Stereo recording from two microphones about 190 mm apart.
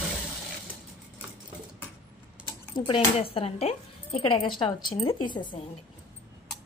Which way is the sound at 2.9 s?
30° left (ahead or behind).